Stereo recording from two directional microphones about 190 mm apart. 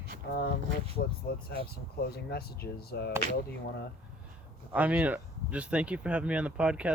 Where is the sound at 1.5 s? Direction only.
55° left (ahead or behind).